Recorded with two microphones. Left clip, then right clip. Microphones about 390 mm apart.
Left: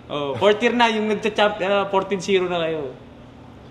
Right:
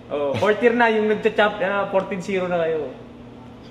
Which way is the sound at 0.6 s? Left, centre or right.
Left.